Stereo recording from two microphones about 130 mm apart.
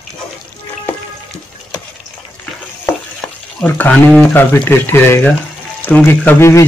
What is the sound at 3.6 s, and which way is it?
Speech, 10° left (ahead or behind).